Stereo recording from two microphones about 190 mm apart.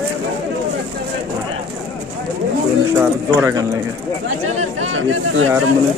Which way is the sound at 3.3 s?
15° right (ahead or behind).